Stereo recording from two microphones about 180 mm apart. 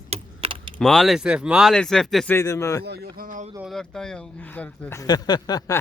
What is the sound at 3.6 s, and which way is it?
Speech, centre (ahead or behind).